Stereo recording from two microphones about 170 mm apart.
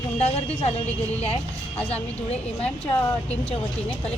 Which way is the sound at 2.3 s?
10° left (ahead or behind).